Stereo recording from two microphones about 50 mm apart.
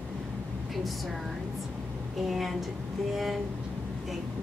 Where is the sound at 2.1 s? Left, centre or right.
Centre.